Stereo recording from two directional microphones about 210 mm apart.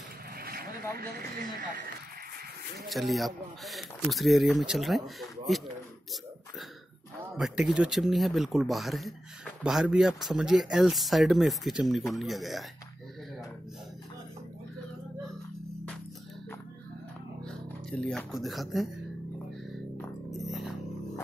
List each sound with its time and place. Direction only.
0.4 s boat: 45° right (ahead or behind)
0.9 s speech: 45° right (ahead or behind)
2.9 s speech: centre (ahead or behind)
7.3 s speech: centre (ahead or behind)
17.5 s speech: 5° left (ahead or behind)
20.2 s music: centre (ahead or behind)